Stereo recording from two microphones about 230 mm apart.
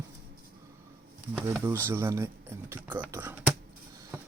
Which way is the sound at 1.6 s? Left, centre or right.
Centre.